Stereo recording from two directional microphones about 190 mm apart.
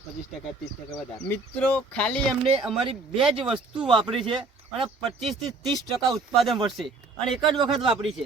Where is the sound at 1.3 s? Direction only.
10° left (ahead or behind).